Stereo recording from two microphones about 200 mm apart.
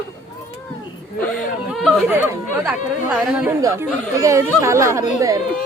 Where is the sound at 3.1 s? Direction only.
5° right (ahead or behind).